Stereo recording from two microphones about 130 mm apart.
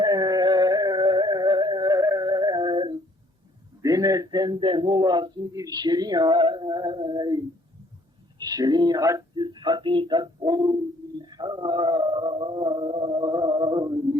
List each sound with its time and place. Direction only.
0.0 s music: 30° right (ahead or behind)
3.8 s speech: 25° right (ahead or behind)
11.2 s a sound: 35° right (ahead or behind)